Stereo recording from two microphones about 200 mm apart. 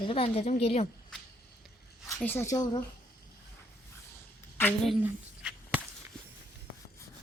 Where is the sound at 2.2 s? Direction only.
10° left (ahead or behind).